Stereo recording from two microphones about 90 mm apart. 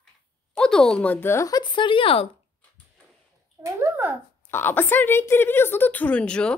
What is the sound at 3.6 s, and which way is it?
Speech, 35° right (ahead or behind).